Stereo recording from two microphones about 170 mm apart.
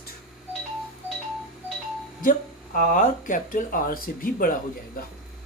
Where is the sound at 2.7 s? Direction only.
50° left (ahead or behind).